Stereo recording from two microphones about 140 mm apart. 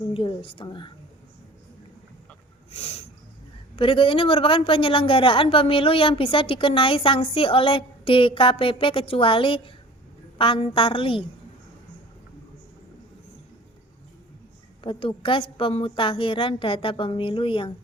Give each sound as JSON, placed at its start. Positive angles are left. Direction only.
{"t": 0.1, "sound": "a man's voice", "side_deg": 40}
{"t": 2.7, "sound": "a sound", "side_deg": 50}
{"t": 3.8, "sound": "a man's voice", "side_deg": 40}
{"t": 14.8, "sound": "a man's voice", "side_deg": 40}